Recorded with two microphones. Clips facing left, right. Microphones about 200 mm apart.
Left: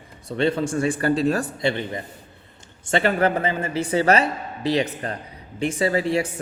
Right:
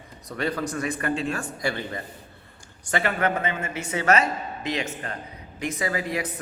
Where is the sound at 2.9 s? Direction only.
30° left (ahead or behind).